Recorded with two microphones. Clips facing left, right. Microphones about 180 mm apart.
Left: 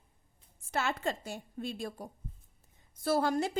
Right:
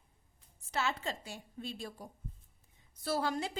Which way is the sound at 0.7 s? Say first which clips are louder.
Left 3 dB; 50° left (ahead or behind).